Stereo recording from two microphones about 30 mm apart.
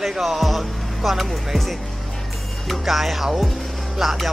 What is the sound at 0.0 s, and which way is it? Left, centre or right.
Speech, centre.